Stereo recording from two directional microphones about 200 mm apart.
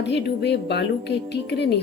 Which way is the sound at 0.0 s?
60° left (ahead or behind).